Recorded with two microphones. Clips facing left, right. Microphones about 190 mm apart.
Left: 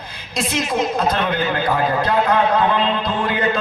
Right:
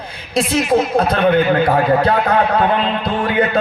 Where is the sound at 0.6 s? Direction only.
65° right (ahead or behind).